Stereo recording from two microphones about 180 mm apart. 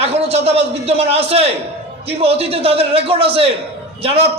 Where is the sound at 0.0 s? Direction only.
35° right (ahead or behind).